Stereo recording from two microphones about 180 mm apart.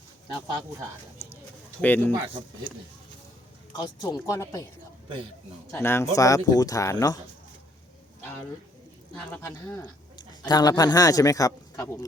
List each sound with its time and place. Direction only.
1.8 s speech: 10° left (ahead or behind)
3.8 s speech: 20° left (ahead or behind)
5.7 s speech: 15° left (ahead or behind)
9.1 s speech: 10° left (ahead or behind)
9.8 s a man's voice: 25° left (ahead or behind)